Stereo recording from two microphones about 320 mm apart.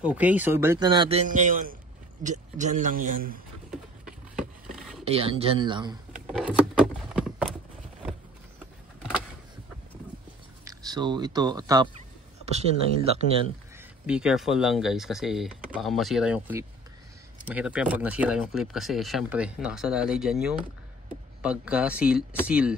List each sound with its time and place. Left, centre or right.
0.0 s a man's voice: centre; by 3.3 s right
3.7 s a sound: centre
5.0 s speech: centre
7.1 s a sound: centre
10.6 s speech: centre
14.0 s speech: centre